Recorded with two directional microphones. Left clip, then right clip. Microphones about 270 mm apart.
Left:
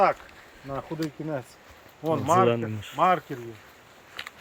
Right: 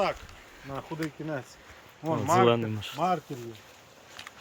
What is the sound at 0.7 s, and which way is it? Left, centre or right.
Speech, left.